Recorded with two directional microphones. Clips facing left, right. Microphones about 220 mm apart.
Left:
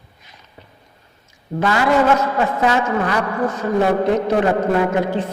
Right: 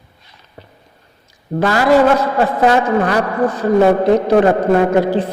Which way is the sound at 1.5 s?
35° right (ahead or behind).